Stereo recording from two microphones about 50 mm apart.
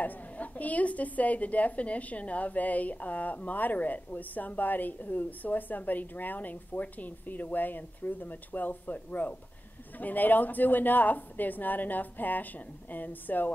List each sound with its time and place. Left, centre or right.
0.0 s a woman's voice: left